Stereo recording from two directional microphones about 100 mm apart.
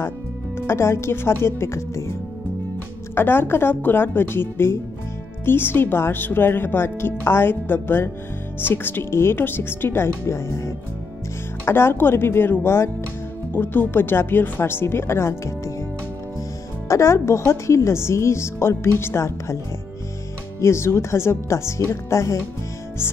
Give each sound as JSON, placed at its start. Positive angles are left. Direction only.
{"t": 0.6, "sound": "a woman's voice", "side_deg": 25}
{"t": 3.2, "sound": "a woman's voice", "side_deg": 20}
{"t": 16.8, "sound": "a woman's voice", "side_deg": 30}
{"t": 20.6, "sound": "a woman's voice", "side_deg": 25}